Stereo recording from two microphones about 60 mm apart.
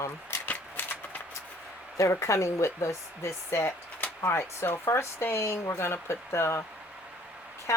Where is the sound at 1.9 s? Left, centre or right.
Left.